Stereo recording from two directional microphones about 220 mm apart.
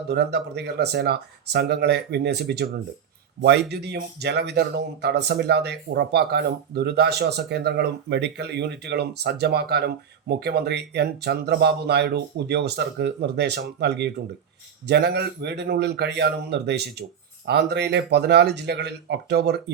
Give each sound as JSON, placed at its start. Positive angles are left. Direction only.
{"t": 0.1, "sound": "speech", "side_deg": -50}